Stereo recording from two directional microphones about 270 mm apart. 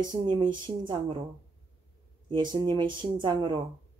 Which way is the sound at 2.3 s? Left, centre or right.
Centre.